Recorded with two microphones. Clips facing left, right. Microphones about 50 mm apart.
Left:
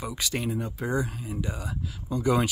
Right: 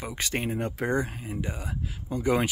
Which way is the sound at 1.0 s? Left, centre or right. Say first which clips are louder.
Even; right.